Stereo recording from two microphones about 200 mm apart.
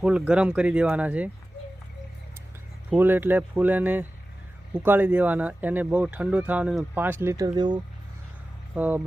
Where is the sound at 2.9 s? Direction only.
10° right (ahead or behind).